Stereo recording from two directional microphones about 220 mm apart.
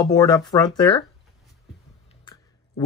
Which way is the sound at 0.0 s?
15° left (ahead or behind).